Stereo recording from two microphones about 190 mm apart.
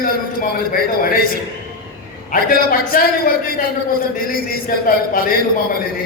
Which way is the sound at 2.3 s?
50° left (ahead or behind).